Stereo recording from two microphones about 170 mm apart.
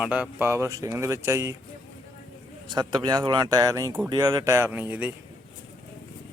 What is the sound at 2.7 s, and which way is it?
Speech, 25° right (ahead or behind).